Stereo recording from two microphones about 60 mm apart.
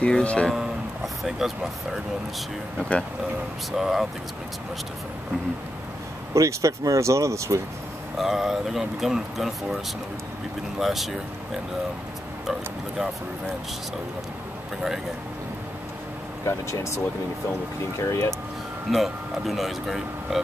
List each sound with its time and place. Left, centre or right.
0.0 s speech: left
1.0 s speech: centre
2.8 s speech: centre
3.7 s speech: centre
6.3 s speech: right
8.2 s speech: centre
10.8 s speech: centre
16.4 s speech: left
18.9 s speech: centre